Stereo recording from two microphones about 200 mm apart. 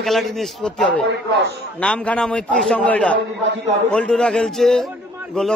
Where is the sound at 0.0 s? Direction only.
Centre (ahead or behind).